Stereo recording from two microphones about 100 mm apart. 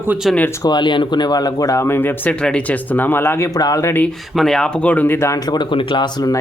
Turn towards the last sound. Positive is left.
turn(degrees=50)  # may be behind; listen again after turning